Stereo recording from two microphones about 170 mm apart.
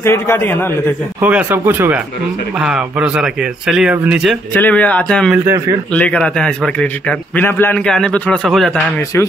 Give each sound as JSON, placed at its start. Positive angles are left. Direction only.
{"t": 0.0, "sound": "a man's voice", "side_deg": 15}
{"t": 1.2, "sound": "a man's voice", "side_deg": -10}
{"t": 4.6, "sound": "a man's voice", "side_deg": 10}
{"t": 5.4, "sound": "speech", "side_deg": -15}
{"t": 5.9, "sound": "a man's voice", "side_deg": 5}